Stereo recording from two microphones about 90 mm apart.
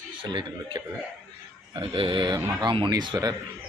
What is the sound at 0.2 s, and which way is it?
A man's voice, 60° right (ahead or behind).